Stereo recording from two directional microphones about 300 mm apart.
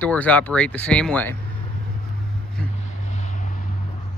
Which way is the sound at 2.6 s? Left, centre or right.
Centre.